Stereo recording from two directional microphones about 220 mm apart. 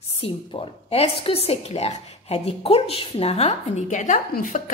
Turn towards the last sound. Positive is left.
turn(degrees=35)  # may be behind; listen again after turning